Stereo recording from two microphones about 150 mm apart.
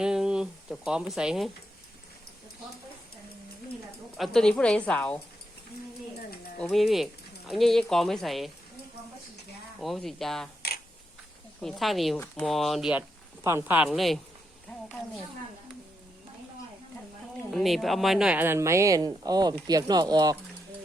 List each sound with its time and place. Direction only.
0.0 s speech: 5° right (ahead or behind)
4.2 s a woman's voice: centre (ahead or behind)
6.6 s speech: centre (ahead or behind)
9.8 s speech: centre (ahead or behind)
11.6 s speech: centre (ahead or behind)
13.4 s speech: 15° right (ahead or behind)
13.9 s a woman's voice: centre (ahead or behind)
17.5 s speech: centre (ahead or behind); by 20.3 s 25° right (ahead or behind)